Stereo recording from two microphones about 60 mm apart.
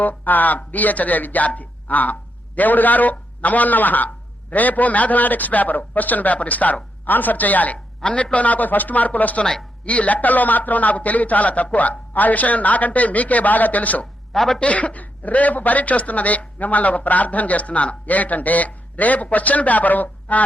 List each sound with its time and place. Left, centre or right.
0.0 s speech: left
14.3 s a woman's voice: centre
14.6 s speech: left